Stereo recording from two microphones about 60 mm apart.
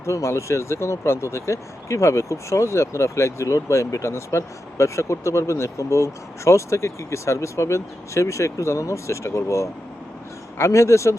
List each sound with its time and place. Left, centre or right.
0.0 s speech: left